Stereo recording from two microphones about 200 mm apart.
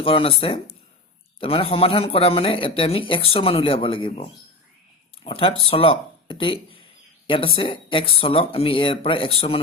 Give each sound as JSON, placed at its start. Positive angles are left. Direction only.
{"t": 0.0, "sound": "speech", "side_deg": 25}